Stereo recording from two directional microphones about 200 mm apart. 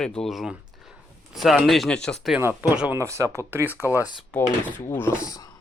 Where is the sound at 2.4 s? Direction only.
10° right (ahead or behind).